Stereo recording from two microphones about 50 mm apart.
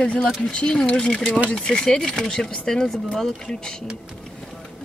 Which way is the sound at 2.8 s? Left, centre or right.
Centre.